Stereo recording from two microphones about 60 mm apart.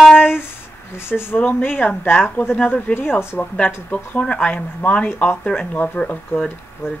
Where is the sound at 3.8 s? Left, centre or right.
Left.